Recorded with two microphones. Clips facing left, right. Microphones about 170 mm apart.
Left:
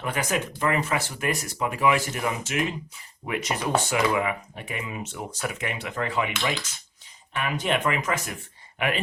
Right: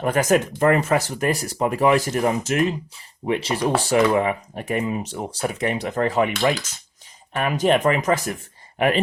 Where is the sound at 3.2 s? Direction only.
30° right (ahead or behind).